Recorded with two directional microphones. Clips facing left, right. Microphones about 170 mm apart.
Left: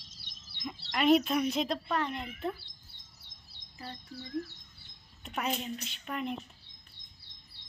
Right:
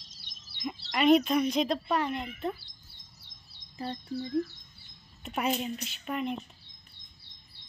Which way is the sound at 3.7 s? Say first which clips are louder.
Right 9 dB; 30° right (ahead or behind).